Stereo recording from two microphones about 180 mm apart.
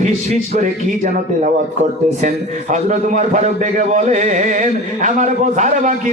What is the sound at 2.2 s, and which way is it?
A man's voice, 45° right (ahead or behind).